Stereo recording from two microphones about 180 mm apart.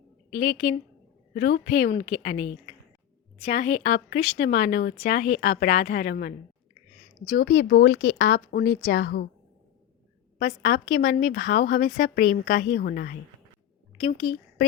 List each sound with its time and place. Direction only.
0.3 s a woman's voice: 45° left (ahead or behind)
1.3 s a woman's voice: 60° left (ahead or behind)
7.6 s a woman's voice: 65° left (ahead or behind)
10.3 s speech: 60° left (ahead or behind)